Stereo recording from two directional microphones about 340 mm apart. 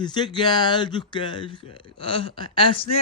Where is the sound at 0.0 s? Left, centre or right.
Centre.